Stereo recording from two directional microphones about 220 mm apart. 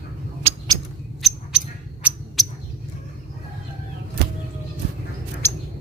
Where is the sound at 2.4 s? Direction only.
Centre (ahead or behind).